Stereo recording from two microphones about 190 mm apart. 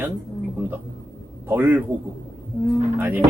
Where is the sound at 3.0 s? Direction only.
10° right (ahead or behind).